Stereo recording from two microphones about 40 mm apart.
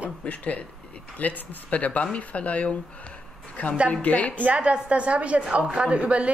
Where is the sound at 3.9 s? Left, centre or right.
Left.